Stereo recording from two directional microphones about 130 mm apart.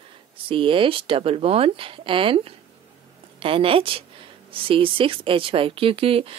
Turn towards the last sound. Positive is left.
turn(degrees=-45)  # may be behind; listen again after turning